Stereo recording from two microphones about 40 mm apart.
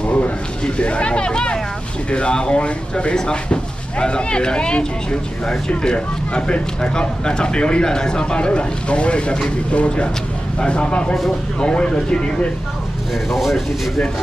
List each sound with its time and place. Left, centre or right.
0.0 s a sound: left
0.7 s speech: left
13.3 s speech: centre